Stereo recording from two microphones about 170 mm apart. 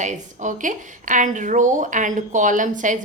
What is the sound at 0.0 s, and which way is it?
A woman's voice, 45° right (ahead or behind).